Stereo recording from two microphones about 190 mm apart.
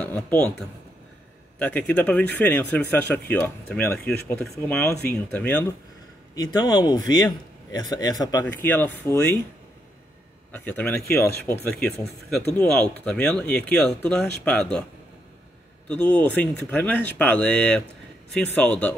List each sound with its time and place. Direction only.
0.0 s speech: 5° left (ahead or behind)
6.3 s speech: 20° left (ahead or behind)
10.5 s speech: 10° left (ahead or behind)
15.9 s speech: 5° left (ahead or behind)